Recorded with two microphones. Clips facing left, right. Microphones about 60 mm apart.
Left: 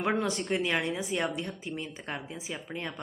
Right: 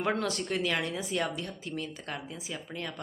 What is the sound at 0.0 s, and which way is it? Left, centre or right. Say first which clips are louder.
Speech: left 1 dB; centre.